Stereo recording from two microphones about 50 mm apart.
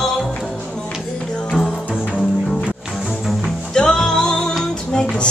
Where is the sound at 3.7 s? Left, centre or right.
Centre.